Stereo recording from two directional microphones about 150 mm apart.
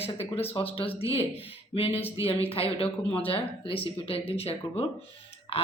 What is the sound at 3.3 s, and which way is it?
Speech, 35° left (ahead or behind).